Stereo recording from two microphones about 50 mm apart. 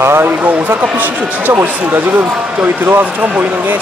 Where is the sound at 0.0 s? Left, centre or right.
Right.